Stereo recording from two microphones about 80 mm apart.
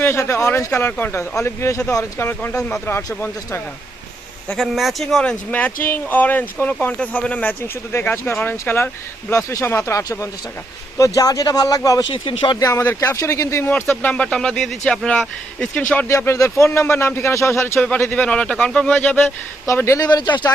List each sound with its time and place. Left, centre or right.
0.0 s speech: left
4.5 s speech: centre
5.5 s speech: left
7.9 s speech: left
10.0 s speech: left
12.0 s speech: left
12.5 s speech: left
13.7 s speech: left
16.0 s speech: left
17.7 s speech: centre
18.9 s speech: left
19.7 s speech: left
20.0 s speech: left